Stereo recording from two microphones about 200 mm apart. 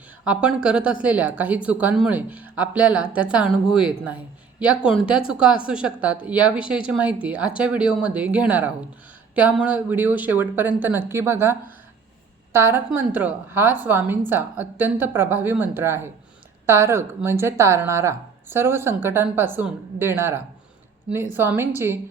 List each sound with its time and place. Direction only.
0.3 s a woman's voice: 5° right (ahead or behind)
12.5 s a woman's voice: 10° right (ahead or behind)